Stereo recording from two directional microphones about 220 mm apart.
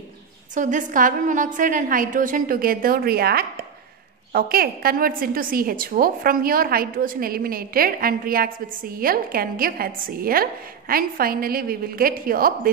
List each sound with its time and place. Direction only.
0.6 s a woman's voice: 35° right (ahead or behind)